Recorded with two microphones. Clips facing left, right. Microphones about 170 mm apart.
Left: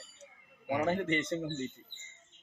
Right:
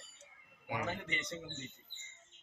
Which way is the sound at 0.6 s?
50° left (ahead or behind).